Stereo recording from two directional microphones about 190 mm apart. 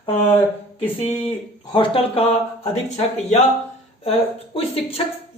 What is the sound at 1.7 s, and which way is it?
Speech, 30° left (ahead or behind).